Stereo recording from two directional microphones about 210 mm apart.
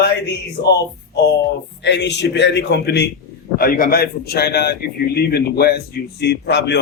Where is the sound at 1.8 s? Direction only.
55° left (ahead or behind).